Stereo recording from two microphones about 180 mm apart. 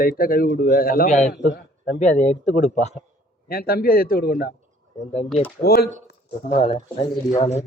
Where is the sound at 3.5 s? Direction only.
55° left (ahead or behind).